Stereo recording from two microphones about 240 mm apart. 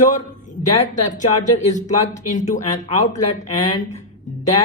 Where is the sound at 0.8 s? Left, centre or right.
Left.